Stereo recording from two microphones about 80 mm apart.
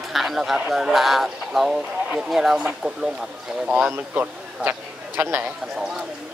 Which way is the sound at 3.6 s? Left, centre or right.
Centre.